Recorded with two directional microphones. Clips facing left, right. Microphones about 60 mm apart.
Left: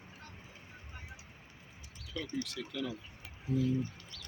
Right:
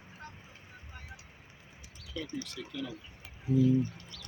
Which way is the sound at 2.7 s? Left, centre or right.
Left.